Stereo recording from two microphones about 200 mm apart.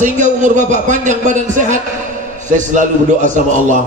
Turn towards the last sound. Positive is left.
turn(degrees=-40)  # may be behind; listen again after turning